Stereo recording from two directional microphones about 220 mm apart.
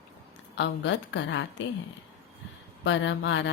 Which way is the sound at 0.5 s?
55° left (ahead or behind).